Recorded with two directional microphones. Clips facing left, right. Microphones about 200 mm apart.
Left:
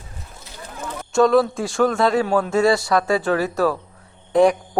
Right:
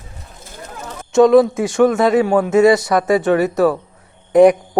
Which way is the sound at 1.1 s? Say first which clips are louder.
Right 6 dB; 20° right (ahead or behind).